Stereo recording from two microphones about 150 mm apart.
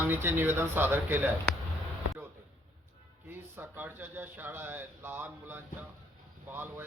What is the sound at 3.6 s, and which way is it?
Speech, 15° right (ahead or behind).